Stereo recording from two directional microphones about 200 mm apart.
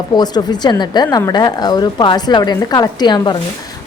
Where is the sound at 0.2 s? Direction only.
20° left (ahead or behind).